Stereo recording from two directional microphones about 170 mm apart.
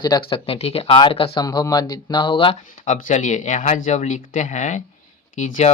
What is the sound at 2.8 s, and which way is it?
Speech, 50° left (ahead or behind).